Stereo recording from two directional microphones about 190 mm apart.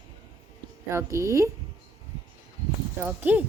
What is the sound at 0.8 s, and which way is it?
Speech, 15° right (ahead or behind).